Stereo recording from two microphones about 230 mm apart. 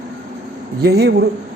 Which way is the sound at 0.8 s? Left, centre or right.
Right.